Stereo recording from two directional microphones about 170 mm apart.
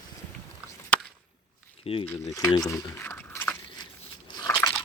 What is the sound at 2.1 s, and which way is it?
Speech, 20° left (ahead or behind).